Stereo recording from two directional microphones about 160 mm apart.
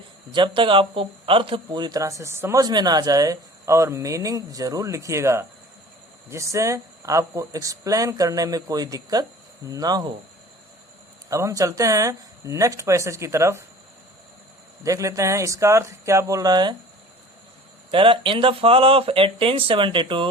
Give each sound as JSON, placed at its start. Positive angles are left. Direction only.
{"t": 0.3, "sound": "speech", "side_deg": -30}
{"t": 11.3, "sound": "speech", "side_deg": -20}
{"t": 14.8, "sound": "speech", "side_deg": -20}
{"t": 17.9, "sound": "speech", "side_deg": -30}